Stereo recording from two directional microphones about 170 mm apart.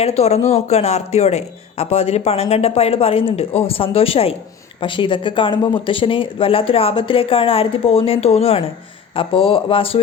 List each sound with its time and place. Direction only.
0.0 s speech: 40° left (ahead or behind)